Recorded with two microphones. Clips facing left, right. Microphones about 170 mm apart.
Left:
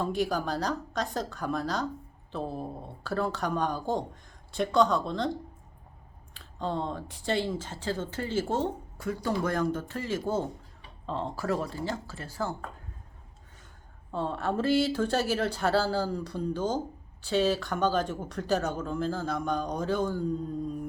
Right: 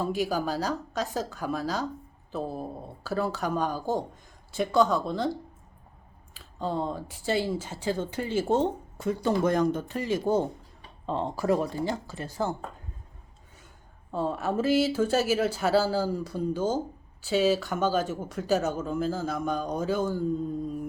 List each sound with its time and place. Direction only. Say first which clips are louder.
0.0 s speech: right 1 dB; 5° right (ahead or behind)
6.3 s speech: right 2 dB; 5° right (ahead or behind); by 12.5 s 20° right (ahead or behind)
14.1 s speech: right 2 dB; 10° right (ahead or behind)